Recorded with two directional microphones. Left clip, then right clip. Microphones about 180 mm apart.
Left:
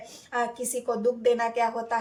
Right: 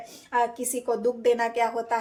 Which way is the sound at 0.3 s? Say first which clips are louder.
Right 3 dB; 40° right (ahead or behind).